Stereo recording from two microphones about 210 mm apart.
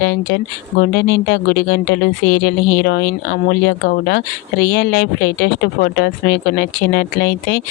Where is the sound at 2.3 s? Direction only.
50° left (ahead or behind).